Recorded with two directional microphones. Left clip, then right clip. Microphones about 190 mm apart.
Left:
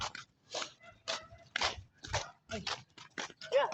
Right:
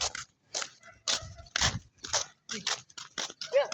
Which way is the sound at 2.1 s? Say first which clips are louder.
Right 5 dB; 40° right (ahead or behind).